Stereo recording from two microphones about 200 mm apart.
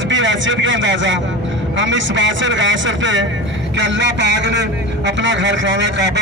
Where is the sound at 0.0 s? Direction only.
65° right (ahead or behind).